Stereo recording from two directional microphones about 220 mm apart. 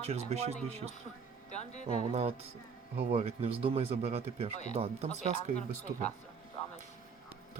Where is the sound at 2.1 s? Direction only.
30° right (ahead or behind).